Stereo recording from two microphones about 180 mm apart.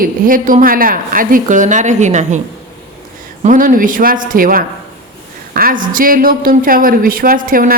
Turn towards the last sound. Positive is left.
turn(degrees=-50)  # may be behind; listen again after turning